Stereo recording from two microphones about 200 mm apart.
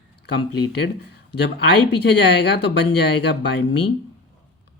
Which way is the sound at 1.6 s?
55° left (ahead or behind).